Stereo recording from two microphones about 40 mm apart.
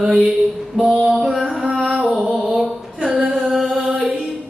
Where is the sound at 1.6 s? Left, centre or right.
Centre.